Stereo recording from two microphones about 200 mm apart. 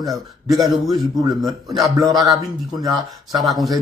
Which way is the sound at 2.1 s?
15° right (ahead or behind).